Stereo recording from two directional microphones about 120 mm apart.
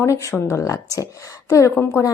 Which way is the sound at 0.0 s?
25° left (ahead or behind).